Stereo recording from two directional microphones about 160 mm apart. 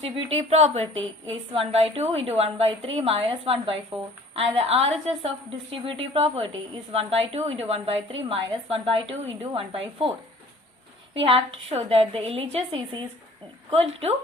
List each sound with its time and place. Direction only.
0.0 s a woman's voice: 40° right (ahead or behind)
11.1 s a woman's voice: 35° right (ahead or behind)